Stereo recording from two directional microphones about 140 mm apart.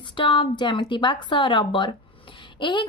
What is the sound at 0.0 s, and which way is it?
A woman's voice, 35° left (ahead or behind).